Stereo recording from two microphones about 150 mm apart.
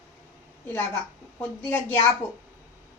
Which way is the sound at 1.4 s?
15° left (ahead or behind).